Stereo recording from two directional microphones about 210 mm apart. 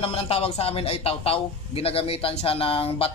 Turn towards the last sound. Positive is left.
turn(degrees=25)  # may be behind; listen again after turning